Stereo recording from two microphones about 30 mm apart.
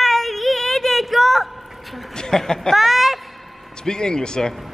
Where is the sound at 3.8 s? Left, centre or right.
Left.